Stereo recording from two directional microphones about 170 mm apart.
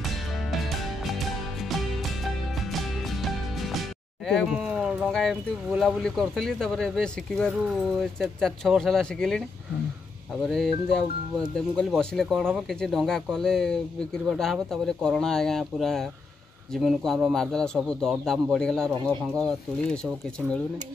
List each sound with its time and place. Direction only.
0.5 s music: centre (ahead or behind)
4.3 s speech: centre (ahead or behind)
10.5 s speech: centre (ahead or behind)